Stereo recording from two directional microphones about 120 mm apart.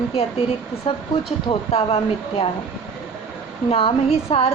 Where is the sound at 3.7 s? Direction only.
50° left (ahead or behind).